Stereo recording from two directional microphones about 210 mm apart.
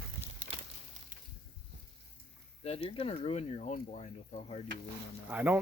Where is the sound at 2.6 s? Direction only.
25° left (ahead or behind).